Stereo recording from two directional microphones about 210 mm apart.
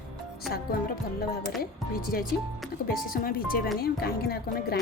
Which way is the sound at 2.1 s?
45° left (ahead or behind).